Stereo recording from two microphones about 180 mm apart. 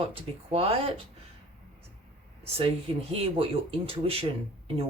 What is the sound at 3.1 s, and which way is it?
Speech, 35° right (ahead or behind).